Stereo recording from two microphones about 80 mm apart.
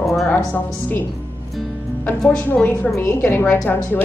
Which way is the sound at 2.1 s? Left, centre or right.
Left.